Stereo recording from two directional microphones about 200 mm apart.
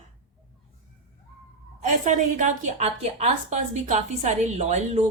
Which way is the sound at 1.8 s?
40° right (ahead or behind).